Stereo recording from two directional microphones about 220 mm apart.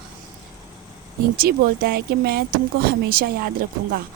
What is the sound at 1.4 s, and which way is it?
Speech, 45° right (ahead or behind).